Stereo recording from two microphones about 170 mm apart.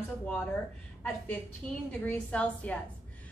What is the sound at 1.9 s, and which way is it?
Speech, 10° left (ahead or behind).